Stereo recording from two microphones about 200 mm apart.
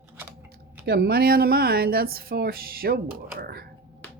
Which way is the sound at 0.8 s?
50° right (ahead or behind).